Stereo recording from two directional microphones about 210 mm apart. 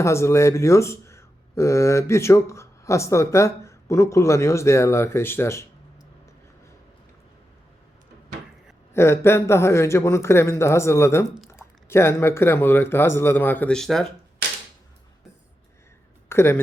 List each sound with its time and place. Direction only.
0.0 s speech: 15° left (ahead or behind)
8.9 s speech: 10° left (ahead or behind)
16.3 s speech: 10° left (ahead or behind)